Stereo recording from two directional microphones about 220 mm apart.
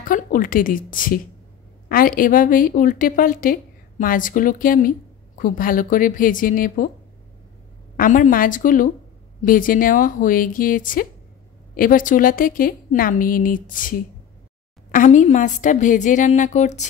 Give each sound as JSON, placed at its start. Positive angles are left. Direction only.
{"t": 0.0, "sound": "a woman's voice", "side_deg": 40}
{"t": 8.0, "sound": "a woman's voice", "side_deg": 40}